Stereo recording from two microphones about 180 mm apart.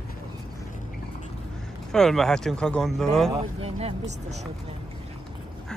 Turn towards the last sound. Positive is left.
turn(degrees=-35)  # may be behind; listen again after turning